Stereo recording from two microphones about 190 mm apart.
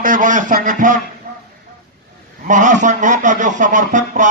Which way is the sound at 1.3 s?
45° right (ahead or behind).